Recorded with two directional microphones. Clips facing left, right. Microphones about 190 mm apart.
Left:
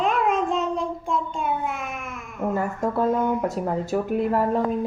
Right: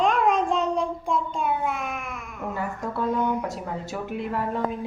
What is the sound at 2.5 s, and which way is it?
Speech, 45° left (ahead or behind).